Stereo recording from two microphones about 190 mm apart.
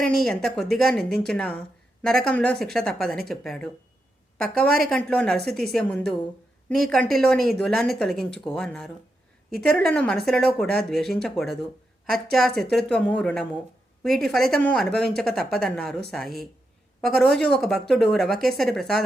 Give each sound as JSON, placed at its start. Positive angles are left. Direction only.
{"t": 0.3, "sound": "a woman's voice", "side_deg": 0}